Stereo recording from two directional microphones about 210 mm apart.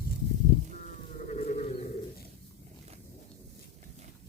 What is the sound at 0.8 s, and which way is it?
Sheep, 35° left (ahead or behind).